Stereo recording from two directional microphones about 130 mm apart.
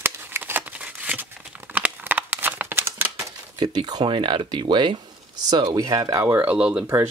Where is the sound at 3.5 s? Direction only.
35° right (ahead or behind); by 6.8 s 10° right (ahead or behind).